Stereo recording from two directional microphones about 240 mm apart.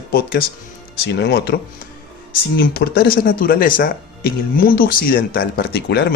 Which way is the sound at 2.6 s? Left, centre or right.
Left.